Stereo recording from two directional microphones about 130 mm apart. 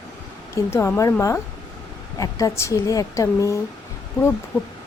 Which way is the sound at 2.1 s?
25° left (ahead or behind).